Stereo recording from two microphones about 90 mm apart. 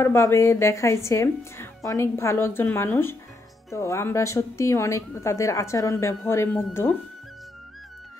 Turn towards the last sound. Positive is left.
turn(degrees=25)  # may be behind; listen again after turning